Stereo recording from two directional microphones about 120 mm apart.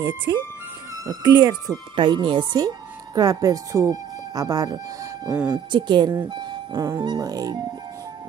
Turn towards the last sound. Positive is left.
turn(degrees=-30)  # may be behind; listen again after turning